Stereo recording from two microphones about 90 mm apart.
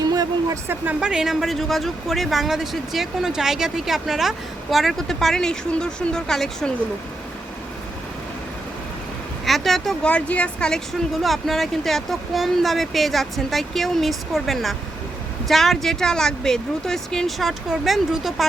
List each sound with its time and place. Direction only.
0.0 s a sound: 45° right (ahead or behind)
0.9 s speech: 10° right (ahead or behind)
9.5 s speech: centre (ahead or behind)
10.1 s a woman's voice: 15° left (ahead or behind)
11.1 s speech: centre (ahead or behind)